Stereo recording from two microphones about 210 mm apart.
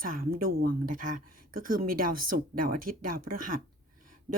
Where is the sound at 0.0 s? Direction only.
45° right (ahead or behind).